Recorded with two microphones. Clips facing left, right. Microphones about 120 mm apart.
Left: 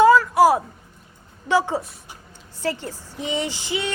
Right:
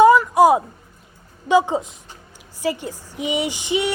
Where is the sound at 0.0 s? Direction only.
15° right (ahead or behind).